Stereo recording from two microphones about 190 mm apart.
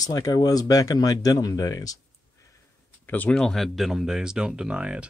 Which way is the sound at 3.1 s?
5° left (ahead or behind).